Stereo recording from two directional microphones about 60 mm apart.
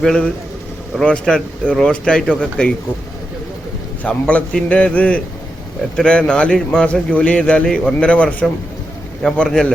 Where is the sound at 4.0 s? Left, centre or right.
Left.